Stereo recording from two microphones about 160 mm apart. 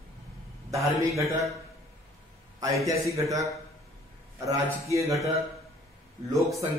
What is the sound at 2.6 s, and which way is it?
Speech, 20° right (ahead or behind).